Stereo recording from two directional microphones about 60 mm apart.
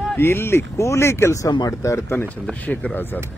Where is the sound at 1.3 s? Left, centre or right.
Left.